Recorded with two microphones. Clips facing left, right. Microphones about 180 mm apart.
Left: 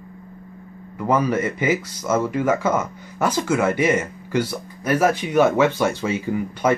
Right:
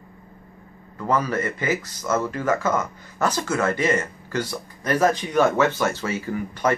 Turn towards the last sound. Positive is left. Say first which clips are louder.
# left 3 dB
turn(degrees=15)  # may be behind; listen again after turning